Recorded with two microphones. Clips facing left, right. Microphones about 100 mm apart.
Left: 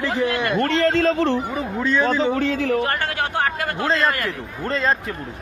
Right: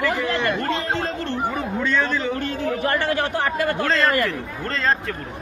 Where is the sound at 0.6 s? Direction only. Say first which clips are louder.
Left 6 dB; 80° left.